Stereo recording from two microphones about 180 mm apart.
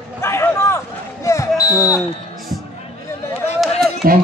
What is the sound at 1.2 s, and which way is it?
Basketball bounce, 15° left (ahead or behind).